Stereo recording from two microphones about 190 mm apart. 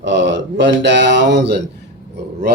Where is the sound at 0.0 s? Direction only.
70° right (ahead or behind).